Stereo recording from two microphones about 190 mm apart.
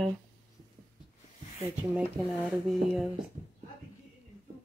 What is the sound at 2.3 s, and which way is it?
Speech, 5° left (ahead or behind).